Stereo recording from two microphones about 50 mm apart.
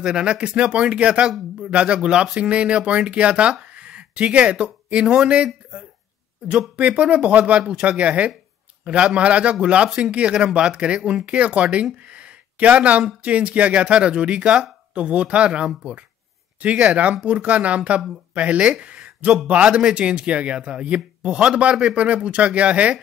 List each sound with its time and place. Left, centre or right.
0.0 s speech: centre